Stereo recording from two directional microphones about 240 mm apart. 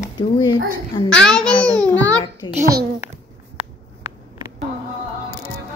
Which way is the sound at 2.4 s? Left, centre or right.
Centre.